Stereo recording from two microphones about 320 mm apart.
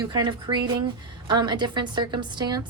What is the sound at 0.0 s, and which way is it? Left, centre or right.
Speech, centre.